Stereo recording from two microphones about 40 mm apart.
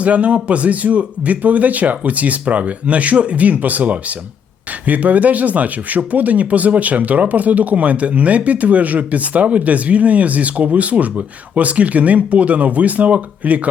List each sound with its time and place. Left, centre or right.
0.0 s speech: right